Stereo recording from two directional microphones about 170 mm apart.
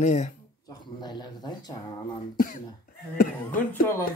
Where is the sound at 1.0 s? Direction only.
25° left (ahead or behind).